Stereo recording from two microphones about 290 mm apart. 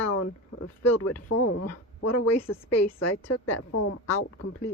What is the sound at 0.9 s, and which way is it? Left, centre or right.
Speech, left.